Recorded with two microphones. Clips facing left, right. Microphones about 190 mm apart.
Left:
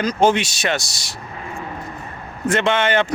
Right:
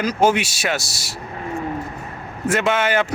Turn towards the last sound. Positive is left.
turn(degrees=-5)  # may be behind; listen again after turning